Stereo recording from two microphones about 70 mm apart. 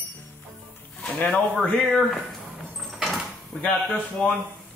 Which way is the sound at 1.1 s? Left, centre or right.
Centre.